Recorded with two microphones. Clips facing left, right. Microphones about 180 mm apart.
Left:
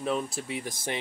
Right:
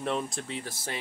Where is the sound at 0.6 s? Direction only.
15° left (ahead or behind).